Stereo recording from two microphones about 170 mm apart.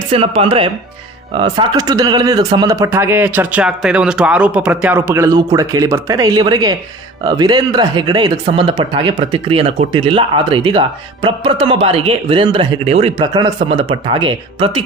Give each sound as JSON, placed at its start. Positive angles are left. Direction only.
{"t": 0.1, "sound": "speech", "side_deg": -35}